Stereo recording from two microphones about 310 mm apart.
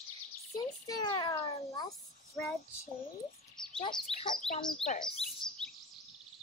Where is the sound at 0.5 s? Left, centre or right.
Centre.